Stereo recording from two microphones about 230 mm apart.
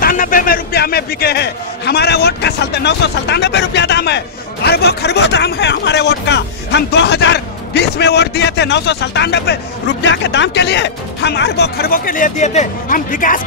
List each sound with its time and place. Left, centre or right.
0.0 s speech: left